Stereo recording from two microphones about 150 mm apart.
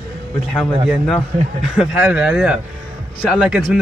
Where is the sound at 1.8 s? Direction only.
10° right (ahead or behind).